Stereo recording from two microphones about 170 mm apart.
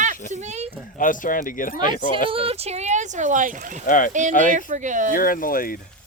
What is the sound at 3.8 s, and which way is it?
Speech, 50° left (ahead or behind).